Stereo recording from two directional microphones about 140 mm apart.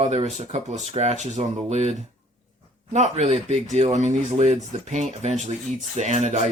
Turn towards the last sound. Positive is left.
turn(degrees=-55)  # may be behind; listen again after turning